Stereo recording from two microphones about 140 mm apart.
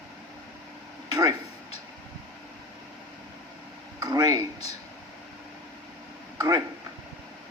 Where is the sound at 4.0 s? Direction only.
25° right (ahead or behind).